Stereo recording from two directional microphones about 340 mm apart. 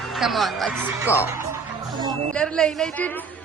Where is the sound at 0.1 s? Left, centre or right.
Centre.